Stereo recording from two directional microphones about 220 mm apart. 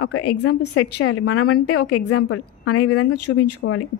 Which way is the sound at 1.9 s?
85° left.